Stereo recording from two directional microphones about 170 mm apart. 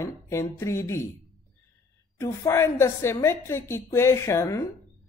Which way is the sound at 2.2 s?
15° left (ahead or behind).